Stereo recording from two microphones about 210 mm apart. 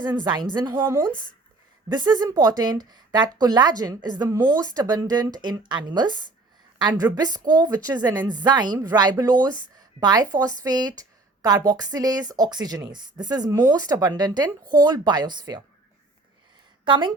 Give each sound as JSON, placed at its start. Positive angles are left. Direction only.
{"t": 0.0, "sound": "a woman's voice", "side_deg": -20}
{"t": 16.8, "sound": "speech", "side_deg": -20}